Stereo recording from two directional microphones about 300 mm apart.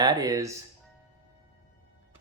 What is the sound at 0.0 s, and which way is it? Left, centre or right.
Speech, centre.